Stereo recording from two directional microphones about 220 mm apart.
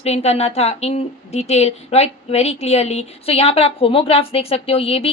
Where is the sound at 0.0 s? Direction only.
30° left (ahead or behind).